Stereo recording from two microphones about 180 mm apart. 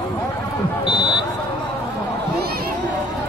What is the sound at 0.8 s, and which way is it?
Buzzer, 35° right (ahead or behind).